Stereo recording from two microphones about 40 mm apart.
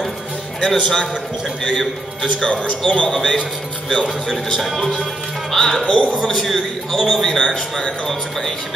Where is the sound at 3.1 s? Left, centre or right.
Centre.